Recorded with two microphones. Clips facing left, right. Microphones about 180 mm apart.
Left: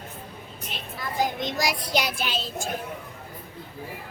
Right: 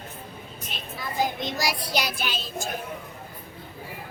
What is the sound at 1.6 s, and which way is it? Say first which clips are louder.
Child singing: left 1 dB; 20° left (ahead or behind).